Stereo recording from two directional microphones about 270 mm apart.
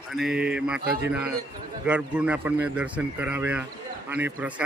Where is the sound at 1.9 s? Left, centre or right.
Centre.